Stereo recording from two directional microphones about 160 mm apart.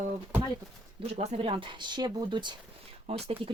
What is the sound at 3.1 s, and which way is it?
Speech, 40° right (ahead or behind).